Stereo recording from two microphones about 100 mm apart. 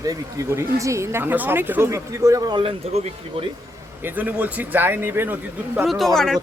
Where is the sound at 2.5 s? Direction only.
65° right (ahead or behind).